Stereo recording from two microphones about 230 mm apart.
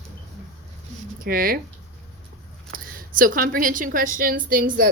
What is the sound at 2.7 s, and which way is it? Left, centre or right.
Speech, right.